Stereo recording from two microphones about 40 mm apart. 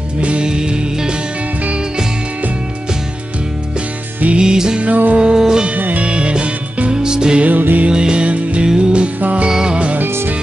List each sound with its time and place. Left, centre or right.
0.2 s music: right
0.5 s music: right
4.4 s music: centre
4.7 s music: right
5.1 s music: right
5.8 s music: right
6.0 s music: right
7.4 s music: right
7.9 s music: right
8.6 s music: right
9.5 s music: centre
9.9 s music: right